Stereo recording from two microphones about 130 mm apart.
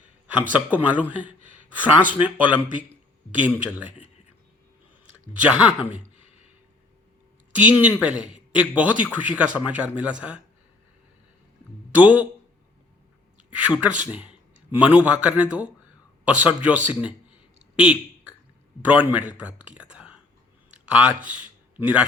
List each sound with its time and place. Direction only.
0.5 s speech: 10° right (ahead or behind)
5.3 s speech: 10° right (ahead or behind)
7.5 s a man's voice: 10° right (ahead or behind)
11.9 s speech: 10° right (ahead or behind)
13.5 s speech: 10° right (ahead or behind)
17.7 s a sound: 10° right (ahead or behind)
18.9 s speech: 10° right (ahead or behind)
21.2 s a sound: 10° right (ahead or behind)